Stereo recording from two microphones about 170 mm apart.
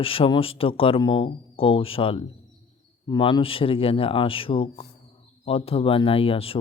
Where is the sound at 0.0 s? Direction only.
30° left (ahead or behind).